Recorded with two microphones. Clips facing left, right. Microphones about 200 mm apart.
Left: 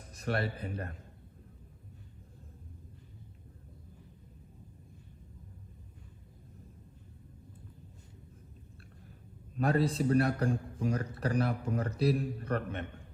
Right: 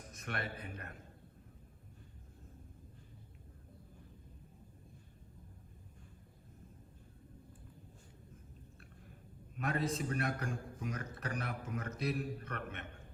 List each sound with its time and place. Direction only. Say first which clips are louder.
0.1 s speech: left 9 dB; 35° left (ahead or behind)
9.6 s a man's voice: left 7 dB; 30° left (ahead or behind)